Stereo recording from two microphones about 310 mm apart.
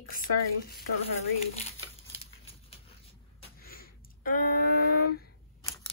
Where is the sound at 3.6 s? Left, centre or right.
Left.